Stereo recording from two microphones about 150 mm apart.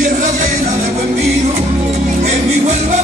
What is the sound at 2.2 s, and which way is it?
Music, 50° right (ahead or behind).